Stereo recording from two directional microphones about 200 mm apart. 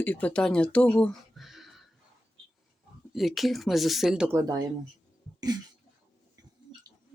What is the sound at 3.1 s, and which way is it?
Speech, centre (ahead or behind).